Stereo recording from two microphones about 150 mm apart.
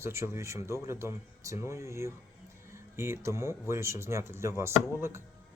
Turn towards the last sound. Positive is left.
turn(degrees=-20)  # may be behind; listen again after turning